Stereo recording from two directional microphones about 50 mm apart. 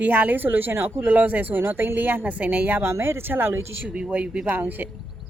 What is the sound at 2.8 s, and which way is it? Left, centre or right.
Speech, right.